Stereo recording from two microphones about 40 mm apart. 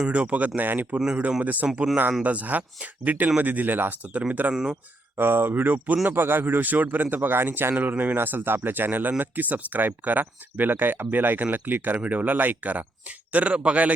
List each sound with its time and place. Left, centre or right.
0.1 s speech: right
1.6 s speech: right
2.2 s speech: right
4.5 s speech: centre
5.1 s speech: right
6.1 s speech: right
6.6 s speech: right
11.9 s speech: right
13.3 s speech: right